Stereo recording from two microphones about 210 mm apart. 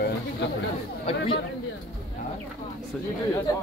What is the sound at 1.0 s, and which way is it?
Speech, 25° left (ahead or behind).